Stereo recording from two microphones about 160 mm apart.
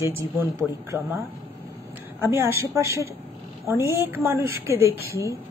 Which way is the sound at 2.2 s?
15° right (ahead or behind).